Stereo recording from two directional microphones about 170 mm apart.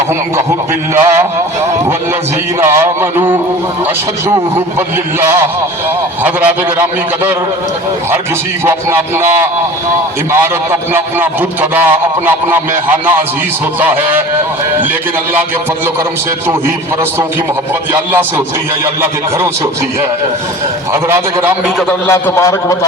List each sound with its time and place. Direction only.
0.9 s a man's voice: 15° right (ahead or behind)
2.6 s a man's voice: 15° right (ahead or behind)
6.2 s a man's voice: 10° right (ahead or behind)
8.6 s a man's voice: 15° right (ahead or behind)
13.7 s a man's voice: 10° right (ahead or behind)
17.9 s a man's voice: 10° right (ahead or behind)
20.9 s a man's voice: 15° right (ahead or behind)
22.0 s a man's voice: 15° left (ahead or behind)